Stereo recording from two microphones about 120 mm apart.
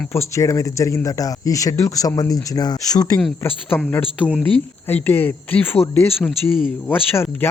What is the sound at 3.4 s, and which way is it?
A man's voice, 20° left (ahead or behind).